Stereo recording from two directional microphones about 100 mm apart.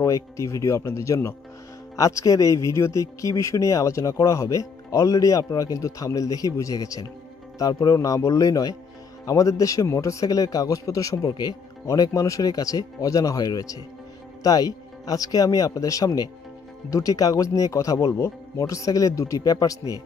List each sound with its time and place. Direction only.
0.0 s a man's voice: 30° left (ahead or behind)